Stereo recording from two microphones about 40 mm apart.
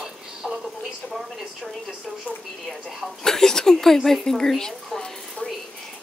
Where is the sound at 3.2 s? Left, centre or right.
Centre.